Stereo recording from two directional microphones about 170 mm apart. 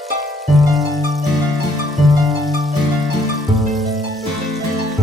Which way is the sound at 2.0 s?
Centre (ahead or behind).